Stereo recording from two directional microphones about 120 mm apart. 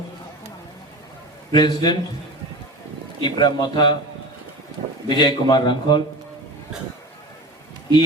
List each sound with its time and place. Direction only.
1.5 s a man's voice: 35° left (ahead or behind)
3.2 s a man's voice: 40° left (ahead or behind)
5.0 s a man's voice: 35° left (ahead or behind)